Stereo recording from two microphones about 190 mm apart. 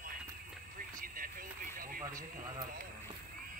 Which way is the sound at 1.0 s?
50° right (ahead or behind).